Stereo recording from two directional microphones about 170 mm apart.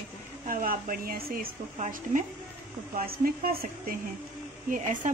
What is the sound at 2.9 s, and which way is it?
Speech, 60° right (ahead or behind).